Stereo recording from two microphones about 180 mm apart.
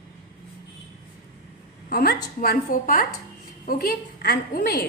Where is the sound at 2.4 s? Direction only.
50° left (ahead or behind).